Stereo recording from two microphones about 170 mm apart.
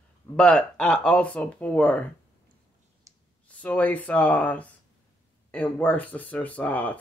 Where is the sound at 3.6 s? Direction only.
10° left (ahead or behind).